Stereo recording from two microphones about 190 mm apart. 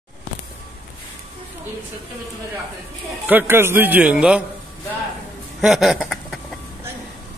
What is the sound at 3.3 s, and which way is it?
A man's voice, 10° right (ahead or behind).